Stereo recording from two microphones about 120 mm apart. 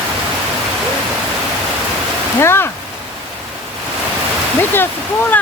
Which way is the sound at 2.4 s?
20° left (ahead or behind).